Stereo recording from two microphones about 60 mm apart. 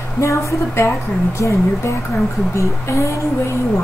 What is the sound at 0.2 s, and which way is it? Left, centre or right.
Speech, left.